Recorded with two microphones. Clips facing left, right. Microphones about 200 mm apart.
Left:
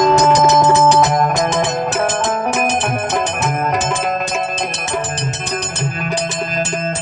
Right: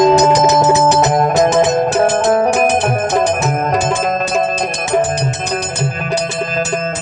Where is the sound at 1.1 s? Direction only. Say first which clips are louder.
Right 5 dB; 30° right (ahead or behind).